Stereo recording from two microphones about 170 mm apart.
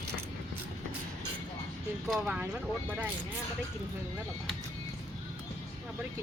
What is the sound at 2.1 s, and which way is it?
Speech, 5° right (ahead or behind).